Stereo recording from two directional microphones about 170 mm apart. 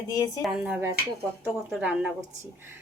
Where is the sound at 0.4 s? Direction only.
5° right (ahead or behind).